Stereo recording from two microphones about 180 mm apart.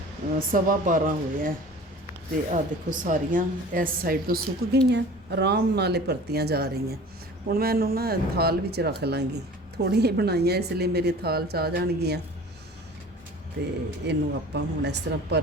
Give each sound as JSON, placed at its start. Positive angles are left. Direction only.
{"t": 0.3, "sound": "a woman's voice", "side_deg": -50}
{"t": 4.9, "sound": "speech", "side_deg": -70}
{"t": 14.1, "sound": "speech", "side_deg": -70}